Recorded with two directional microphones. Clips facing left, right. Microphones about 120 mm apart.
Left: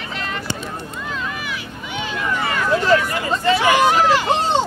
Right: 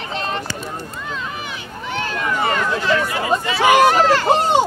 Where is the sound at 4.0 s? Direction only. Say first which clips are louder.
Right 1 dB; 15° left (ahead or behind).